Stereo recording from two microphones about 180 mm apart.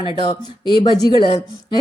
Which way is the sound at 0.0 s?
25° left (ahead or behind).